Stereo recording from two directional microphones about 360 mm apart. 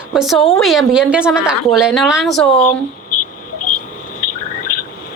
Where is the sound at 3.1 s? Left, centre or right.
Left.